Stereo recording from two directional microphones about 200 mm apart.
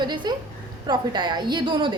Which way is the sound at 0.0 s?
20° right (ahead or behind).